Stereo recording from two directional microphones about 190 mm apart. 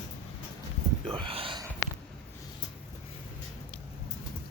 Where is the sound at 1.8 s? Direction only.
15° left (ahead or behind).